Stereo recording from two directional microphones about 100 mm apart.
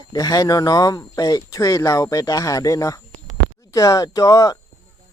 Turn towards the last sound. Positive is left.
turn(degrees=35)  # may be behind; listen again after turning